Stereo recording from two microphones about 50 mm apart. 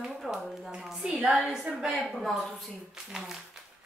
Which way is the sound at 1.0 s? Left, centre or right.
Right.